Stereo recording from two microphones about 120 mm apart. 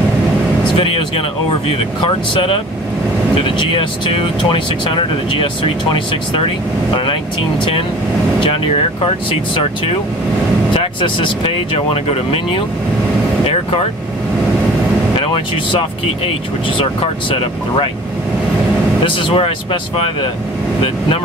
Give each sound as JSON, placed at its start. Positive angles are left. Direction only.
{"t": 3.4, "sound": "speech", "side_deg": 45}
{"t": 10.7, "sound": "speech", "side_deg": 50}
{"t": 15.1, "sound": "speech", "side_deg": 50}
{"t": 16.8, "sound": "speech", "side_deg": 50}
{"t": 19.0, "sound": "speech", "side_deg": 50}